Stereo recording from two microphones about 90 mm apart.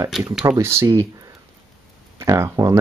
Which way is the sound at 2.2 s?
30° right (ahead or behind).